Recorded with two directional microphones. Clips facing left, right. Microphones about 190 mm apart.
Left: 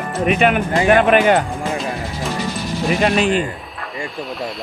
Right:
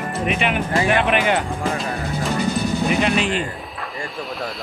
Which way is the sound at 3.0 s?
45° left (ahead or behind).